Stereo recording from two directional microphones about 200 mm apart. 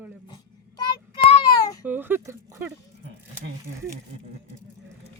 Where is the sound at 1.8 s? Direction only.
10° right (ahead or behind).